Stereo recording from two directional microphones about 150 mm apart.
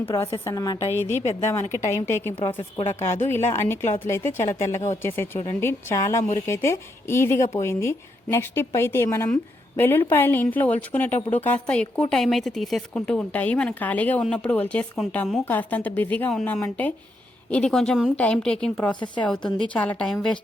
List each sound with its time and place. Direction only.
0.0 s a woman's voice: 20° left (ahead or behind); by 20.4 s 5° left (ahead or behind)